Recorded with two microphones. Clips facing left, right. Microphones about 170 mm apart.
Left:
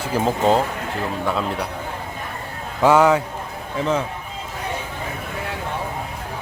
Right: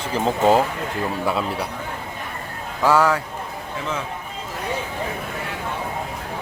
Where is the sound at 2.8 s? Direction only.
20° left (ahead or behind).